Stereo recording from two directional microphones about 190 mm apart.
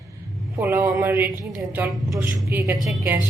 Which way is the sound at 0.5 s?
15° right (ahead or behind).